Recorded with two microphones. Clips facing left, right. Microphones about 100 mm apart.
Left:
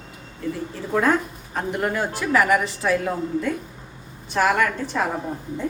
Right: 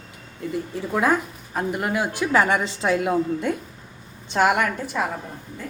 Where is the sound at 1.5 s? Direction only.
5° right (ahead or behind).